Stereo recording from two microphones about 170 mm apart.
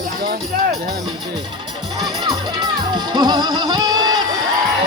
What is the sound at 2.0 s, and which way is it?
Music, 25° right (ahead or behind).